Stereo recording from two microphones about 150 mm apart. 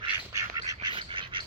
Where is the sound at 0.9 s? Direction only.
35° right (ahead or behind).